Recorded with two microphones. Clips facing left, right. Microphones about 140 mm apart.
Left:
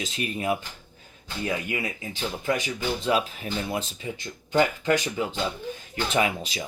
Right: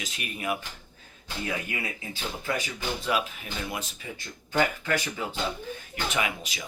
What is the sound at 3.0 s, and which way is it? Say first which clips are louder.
Speech: left 3 dB; 30° left (ahead or behind).